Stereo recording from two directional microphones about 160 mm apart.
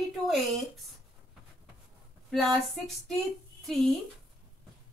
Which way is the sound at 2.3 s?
Centre (ahead or behind).